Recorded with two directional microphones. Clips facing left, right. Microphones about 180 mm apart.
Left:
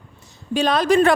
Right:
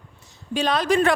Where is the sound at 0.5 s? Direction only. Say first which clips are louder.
Left 4 dB; 40° left (ahead or behind).